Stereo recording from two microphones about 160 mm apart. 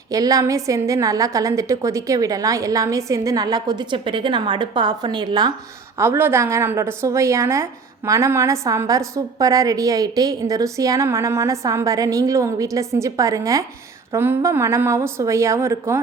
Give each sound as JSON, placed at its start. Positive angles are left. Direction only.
{"t": 0.1, "sound": "a woman's voice", "side_deg": -20}
{"t": 6.0, "sound": "a woman's voice", "side_deg": -15}